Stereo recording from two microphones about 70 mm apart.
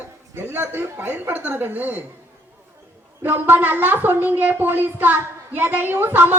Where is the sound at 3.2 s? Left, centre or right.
Right.